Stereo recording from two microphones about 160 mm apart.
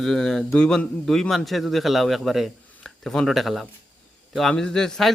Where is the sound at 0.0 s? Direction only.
Centre (ahead or behind).